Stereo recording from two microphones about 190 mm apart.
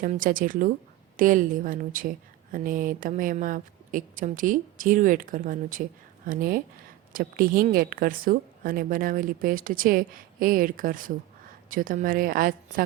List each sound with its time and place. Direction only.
0.0 s a woman's voice: 45° right (ahead or behind)